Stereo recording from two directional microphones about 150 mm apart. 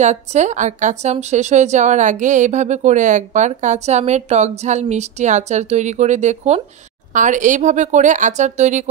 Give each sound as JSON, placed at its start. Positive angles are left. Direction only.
{"t": 0.0, "sound": "a woman's voice", "side_deg": -50}